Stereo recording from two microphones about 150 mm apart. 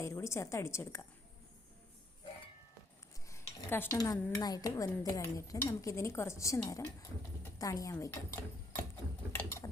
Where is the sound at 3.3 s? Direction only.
15° left (ahead or behind).